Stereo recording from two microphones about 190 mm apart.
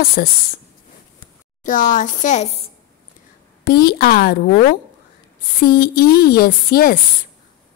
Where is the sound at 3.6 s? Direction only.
55° left (ahead or behind).